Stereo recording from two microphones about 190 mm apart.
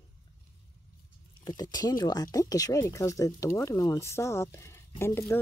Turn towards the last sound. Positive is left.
turn(degrees=15)  # may be behind; listen again after turning